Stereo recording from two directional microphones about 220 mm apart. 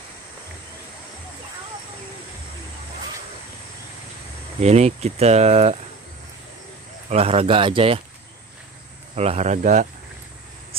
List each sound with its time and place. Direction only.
4.6 s speech: 30° right (ahead or behind)
7.1 s speech: 25° right (ahead or behind)
9.1 s a man's voice: 30° right (ahead or behind)